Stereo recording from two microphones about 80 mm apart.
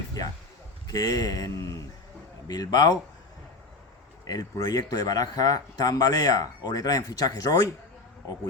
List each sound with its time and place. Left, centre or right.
0.9 s speech: left
4.3 s speech: left